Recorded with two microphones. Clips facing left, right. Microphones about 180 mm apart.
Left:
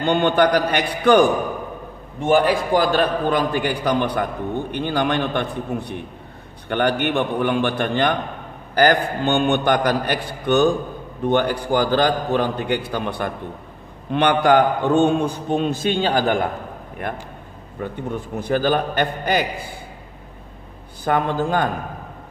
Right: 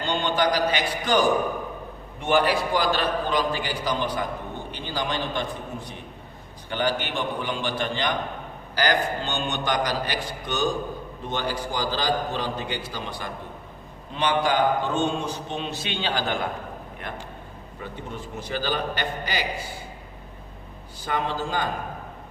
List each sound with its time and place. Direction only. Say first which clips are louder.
0.0 s a man's voice: left 7 dB; 55° left (ahead or behind)
2.2 s a man's voice: left 5 dB; 45° left (ahead or behind)
17.8 s a man's voice: left 8 dB; 55° left (ahead or behind)
21.0 s a man's voice: left 7 dB; 55° left (ahead or behind)